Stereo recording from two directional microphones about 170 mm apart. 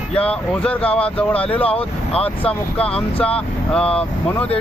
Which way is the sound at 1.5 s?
35° left (ahead or behind).